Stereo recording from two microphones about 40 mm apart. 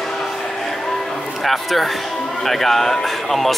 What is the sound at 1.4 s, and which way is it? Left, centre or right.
Speech, centre.